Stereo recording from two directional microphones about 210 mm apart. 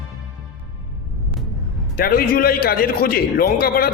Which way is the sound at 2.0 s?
45° left (ahead or behind).